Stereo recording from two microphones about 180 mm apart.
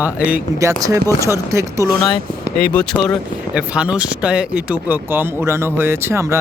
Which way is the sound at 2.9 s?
Centre (ahead or behind).